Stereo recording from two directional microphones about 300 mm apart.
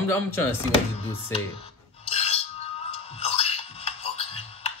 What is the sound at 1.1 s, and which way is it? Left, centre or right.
Music, centre.